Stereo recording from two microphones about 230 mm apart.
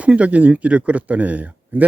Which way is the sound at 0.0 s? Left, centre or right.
Centre.